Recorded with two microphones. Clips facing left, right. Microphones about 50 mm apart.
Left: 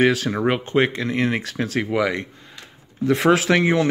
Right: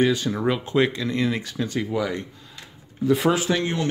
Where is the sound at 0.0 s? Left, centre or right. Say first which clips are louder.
Left 3 dB; left.